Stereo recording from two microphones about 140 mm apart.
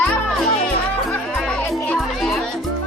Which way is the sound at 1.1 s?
5° left (ahead or behind).